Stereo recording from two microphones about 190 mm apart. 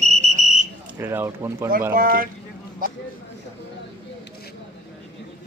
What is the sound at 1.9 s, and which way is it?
Speech, 50° right (ahead or behind).